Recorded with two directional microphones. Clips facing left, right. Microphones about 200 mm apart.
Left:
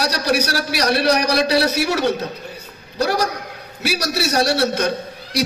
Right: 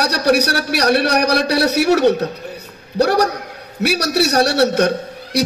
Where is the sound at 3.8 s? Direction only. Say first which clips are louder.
Right 5 dB; 65° right (ahead or behind).